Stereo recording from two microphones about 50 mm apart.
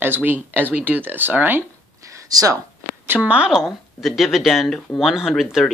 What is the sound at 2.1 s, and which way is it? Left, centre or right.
Speech, right.